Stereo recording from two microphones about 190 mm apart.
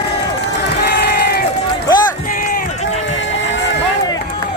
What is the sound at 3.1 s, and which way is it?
Run, 80° left.